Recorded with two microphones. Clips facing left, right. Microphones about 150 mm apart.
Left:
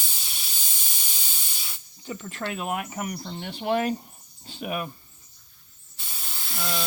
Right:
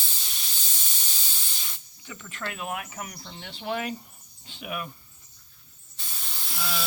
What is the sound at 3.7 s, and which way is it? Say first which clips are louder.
Speech: left 6 dB; 40° left (ahead or behind).